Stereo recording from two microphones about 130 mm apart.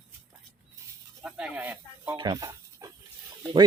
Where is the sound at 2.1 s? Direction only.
40° right (ahead or behind).